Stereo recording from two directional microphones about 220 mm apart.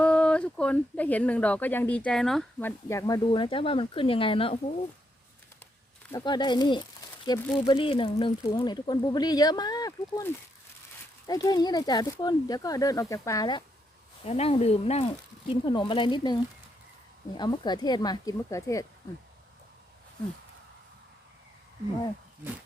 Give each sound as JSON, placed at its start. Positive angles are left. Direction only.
{"t": 0.0, "sound": "speech", "side_deg": 5}
{"t": 6.1, "sound": "speech", "side_deg": 15}
{"t": 7.6, "sound": "speech", "side_deg": 25}